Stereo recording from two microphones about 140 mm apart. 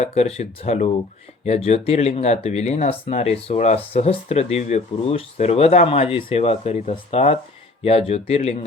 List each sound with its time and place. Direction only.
0.0 s speech: 50° left (ahead or behind)